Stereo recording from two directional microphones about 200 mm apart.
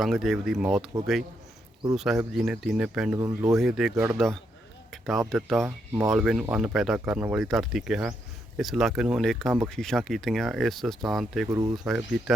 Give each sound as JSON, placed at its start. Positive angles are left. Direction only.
{"t": 0.0, "sound": "speech", "side_deg": 0}
{"t": 2.0, "sound": "speech", "side_deg": 0}
{"t": 3.2, "sound": "speech", "side_deg": -15}
{"t": 3.5, "sound": "speech", "side_deg": 0}
{"t": 5.6, "sound": "speech", "side_deg": -10}
{"t": 11.5, "sound": "speech", "side_deg": -15}
{"t": 11.9, "sound": "speech", "side_deg": 0}